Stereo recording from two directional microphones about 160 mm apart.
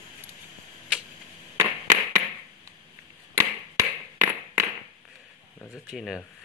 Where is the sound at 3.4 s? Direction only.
15° right (ahead or behind).